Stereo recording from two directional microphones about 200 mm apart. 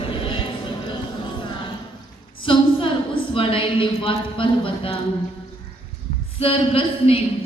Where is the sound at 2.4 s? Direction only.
25° left (ahead or behind).